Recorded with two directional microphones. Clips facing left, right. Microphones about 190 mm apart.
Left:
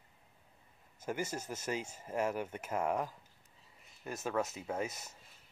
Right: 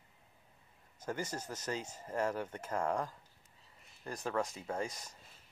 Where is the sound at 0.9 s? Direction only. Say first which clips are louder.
Left 1 dB; 10° left (ahead or behind).